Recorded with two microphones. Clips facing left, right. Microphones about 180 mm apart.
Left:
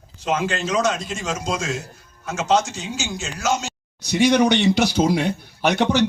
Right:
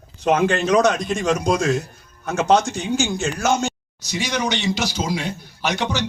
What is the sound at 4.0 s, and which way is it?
Speech, 60° left (ahead or behind).